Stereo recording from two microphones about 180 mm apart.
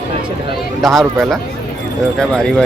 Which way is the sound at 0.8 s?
Centre (ahead or behind).